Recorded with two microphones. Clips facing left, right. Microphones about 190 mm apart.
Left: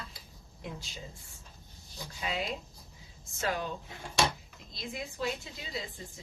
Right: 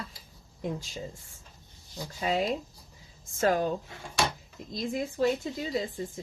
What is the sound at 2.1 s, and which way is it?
Speech, 40° right (ahead or behind).